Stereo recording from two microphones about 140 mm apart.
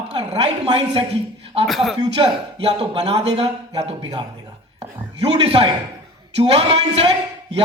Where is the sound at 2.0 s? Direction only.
40° right (ahead or behind).